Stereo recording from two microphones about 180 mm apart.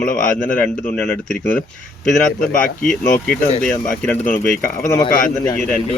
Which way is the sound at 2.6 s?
50° left (ahead or behind).